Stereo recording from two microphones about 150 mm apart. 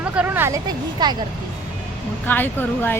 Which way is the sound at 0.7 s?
30° right (ahead or behind).